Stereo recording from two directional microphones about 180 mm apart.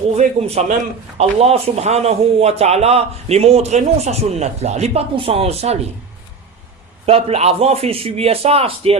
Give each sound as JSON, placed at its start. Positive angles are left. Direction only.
{"t": 0.2, "sound": "a man's voice", "side_deg": -40}
{"t": 7.0, "sound": "a man's voice", "side_deg": -35}